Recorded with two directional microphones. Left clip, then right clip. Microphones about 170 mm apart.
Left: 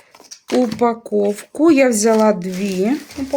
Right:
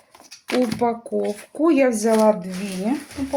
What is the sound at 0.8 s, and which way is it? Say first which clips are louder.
Speech: left 5 dB; 45° left (ahead or behind).